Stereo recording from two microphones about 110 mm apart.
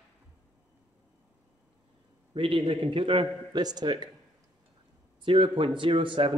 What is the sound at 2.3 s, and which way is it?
Speech, 55° right (ahead or behind).